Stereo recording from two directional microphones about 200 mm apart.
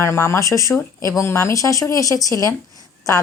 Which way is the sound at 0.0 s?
15° left (ahead or behind).